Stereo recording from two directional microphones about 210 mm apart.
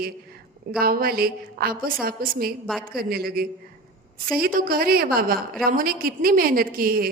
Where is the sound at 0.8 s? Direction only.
45° right (ahead or behind).